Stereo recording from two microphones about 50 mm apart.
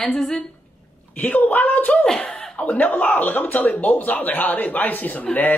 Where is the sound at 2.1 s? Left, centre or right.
Centre.